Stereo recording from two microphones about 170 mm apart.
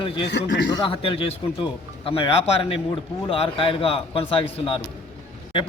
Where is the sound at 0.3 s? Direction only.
90° left.